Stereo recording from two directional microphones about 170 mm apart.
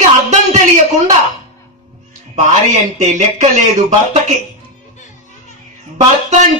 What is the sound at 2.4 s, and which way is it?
Speech, 45° right (ahead or behind).